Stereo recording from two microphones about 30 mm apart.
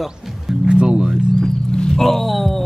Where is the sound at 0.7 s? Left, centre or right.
Right.